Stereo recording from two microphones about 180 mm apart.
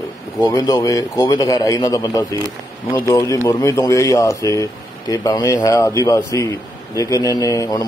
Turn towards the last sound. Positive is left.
turn(degrees=20)  # may be behind; listen again after turning